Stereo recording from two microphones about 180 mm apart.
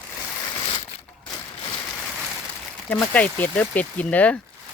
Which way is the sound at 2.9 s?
10° left (ahead or behind).